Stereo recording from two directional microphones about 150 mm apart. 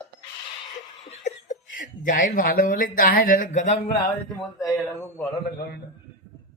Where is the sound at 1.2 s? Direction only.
55° left (ahead or behind).